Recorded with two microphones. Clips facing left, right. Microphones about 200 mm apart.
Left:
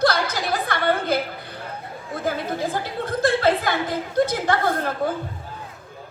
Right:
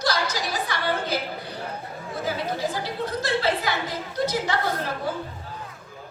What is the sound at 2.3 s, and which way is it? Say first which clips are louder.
A woman's voice: left 3 dB; 55° left (ahead or behind).